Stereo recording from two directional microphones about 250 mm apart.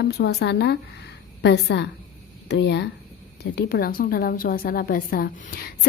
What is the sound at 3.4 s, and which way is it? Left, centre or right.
A woman's voice, left.